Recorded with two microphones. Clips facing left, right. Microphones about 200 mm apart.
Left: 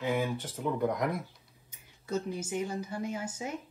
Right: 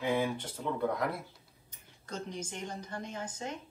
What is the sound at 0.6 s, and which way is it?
A woman's voice, 15° left (ahead or behind).